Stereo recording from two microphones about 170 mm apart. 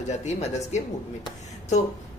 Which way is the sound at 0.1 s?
40° left (ahead or behind).